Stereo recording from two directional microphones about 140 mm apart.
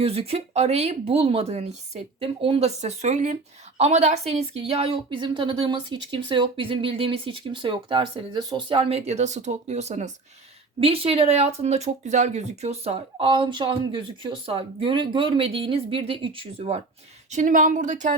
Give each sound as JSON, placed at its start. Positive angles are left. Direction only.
{"t": 0.0, "sound": "speech", "side_deg": -45}
{"t": 10.8, "sound": "speech", "side_deg": -45}
{"t": 13.4, "sound": "speech", "side_deg": -35}
{"t": 17.3, "sound": "speech", "side_deg": -70}